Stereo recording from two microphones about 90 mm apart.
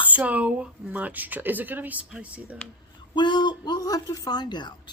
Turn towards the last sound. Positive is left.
turn(degrees=55)  # may be behind; listen again after turning